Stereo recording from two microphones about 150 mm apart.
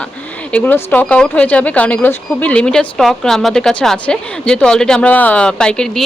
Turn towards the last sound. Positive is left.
turn(degrees=5)  # may be behind; listen again after turning